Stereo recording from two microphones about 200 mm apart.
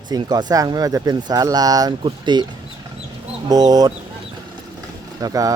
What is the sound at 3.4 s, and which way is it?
Speech, 20° right (ahead or behind).